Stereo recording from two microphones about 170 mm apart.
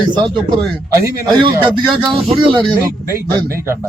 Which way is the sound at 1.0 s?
25° right (ahead or behind).